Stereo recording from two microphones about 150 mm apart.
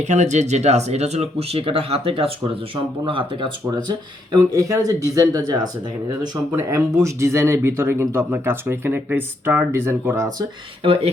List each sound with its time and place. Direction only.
0.0 s speech: 50° right (ahead or behind)
3.8 s speech: 25° right (ahead or behind)